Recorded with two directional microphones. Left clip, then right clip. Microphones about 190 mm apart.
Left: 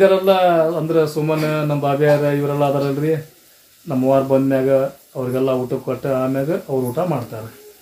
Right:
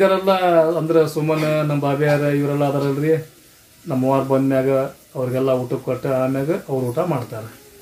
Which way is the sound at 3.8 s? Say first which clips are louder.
Left 3 dB; 5° left (ahead or behind).